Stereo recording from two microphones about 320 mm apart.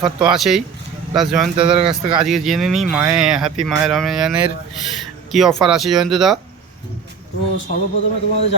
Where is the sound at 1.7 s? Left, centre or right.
Centre.